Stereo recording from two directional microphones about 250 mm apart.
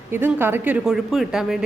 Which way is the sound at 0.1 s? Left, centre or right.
Centre.